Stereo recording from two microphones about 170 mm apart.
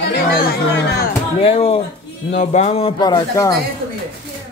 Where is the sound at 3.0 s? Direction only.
25° left (ahead or behind).